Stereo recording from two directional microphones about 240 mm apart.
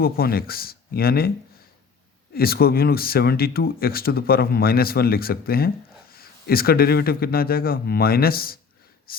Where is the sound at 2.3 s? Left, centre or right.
Left.